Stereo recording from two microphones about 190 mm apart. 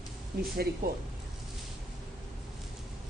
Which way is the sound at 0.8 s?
50° right (ahead or behind).